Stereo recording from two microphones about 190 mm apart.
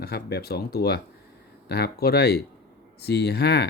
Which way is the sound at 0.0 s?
55° left (ahead or behind).